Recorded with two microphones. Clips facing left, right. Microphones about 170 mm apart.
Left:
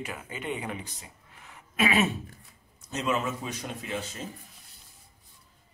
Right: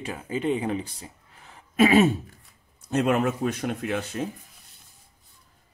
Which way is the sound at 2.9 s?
55° right (ahead or behind).